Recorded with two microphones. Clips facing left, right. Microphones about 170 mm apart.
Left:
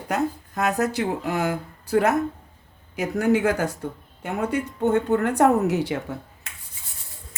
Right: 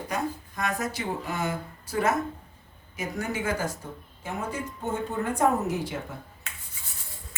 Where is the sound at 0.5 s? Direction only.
70° left (ahead or behind).